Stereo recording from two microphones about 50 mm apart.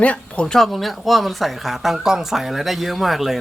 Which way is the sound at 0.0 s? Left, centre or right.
Left.